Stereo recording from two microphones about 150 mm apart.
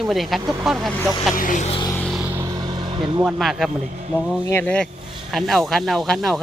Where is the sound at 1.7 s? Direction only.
30° left (ahead or behind).